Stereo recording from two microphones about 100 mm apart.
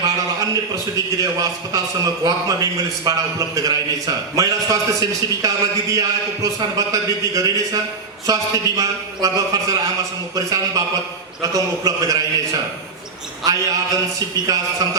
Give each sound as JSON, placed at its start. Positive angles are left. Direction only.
{"t": 0.0, "sound": "a man's voice", "side_deg": -35}
{"t": 13.4, "sound": "a man's voice", "side_deg": -35}